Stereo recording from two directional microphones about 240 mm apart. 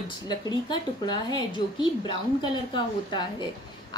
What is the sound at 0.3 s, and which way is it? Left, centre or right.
A woman's voice, centre.